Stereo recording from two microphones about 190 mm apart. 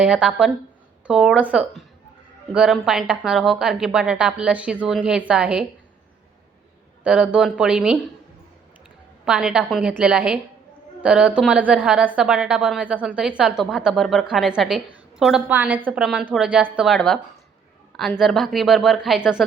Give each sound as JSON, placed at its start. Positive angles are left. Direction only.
{"t": 0.0, "sound": "a woman's voice", "side_deg": -5}
{"t": 7.0, "sound": "a woman's voice", "side_deg": -5}
{"t": 9.2, "sound": "a woman's voice", "side_deg": -5}
{"t": 18.2, "sound": "a woman's voice", "side_deg": 0}